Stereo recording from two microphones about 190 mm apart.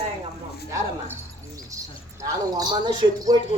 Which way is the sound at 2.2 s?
20° right (ahead or behind).